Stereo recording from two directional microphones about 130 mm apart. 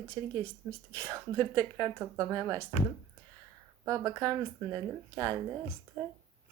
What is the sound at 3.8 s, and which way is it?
Speech, 25° right (ahead or behind).